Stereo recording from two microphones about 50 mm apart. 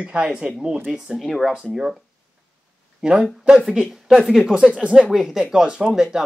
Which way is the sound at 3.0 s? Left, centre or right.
Centre.